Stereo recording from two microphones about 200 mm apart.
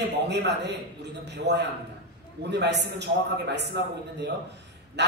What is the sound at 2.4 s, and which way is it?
Speech, 60° right (ahead or behind).